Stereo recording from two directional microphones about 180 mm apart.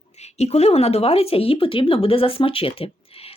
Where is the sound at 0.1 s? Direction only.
35° left (ahead or behind).